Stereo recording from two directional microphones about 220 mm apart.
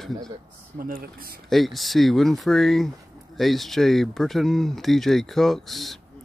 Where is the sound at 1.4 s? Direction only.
Centre (ahead or behind).